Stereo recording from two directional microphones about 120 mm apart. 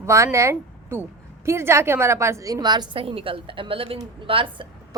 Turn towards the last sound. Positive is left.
turn(degrees=-45)  # may be behind; listen again after turning